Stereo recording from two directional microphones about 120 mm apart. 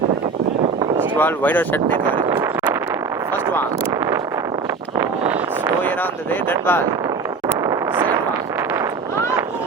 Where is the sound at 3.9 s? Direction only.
25° right (ahead or behind).